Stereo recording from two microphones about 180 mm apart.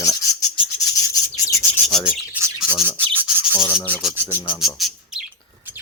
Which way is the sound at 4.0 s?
5° right (ahead or behind).